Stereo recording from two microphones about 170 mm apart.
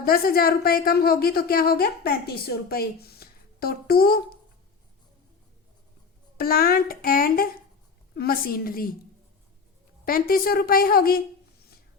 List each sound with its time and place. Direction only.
0.0 s a woman's voice: 60° left (ahead or behind)
6.3 s a woman's voice: 60° left (ahead or behind)
10.1 s a woman's voice: 60° left (ahead or behind)